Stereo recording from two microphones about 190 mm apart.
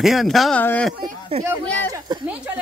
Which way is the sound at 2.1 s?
25° right (ahead or behind).